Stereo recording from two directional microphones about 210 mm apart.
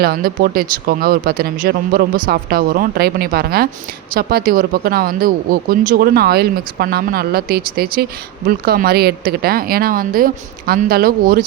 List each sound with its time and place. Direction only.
0.0 s speech: 45° right (ahead or behind)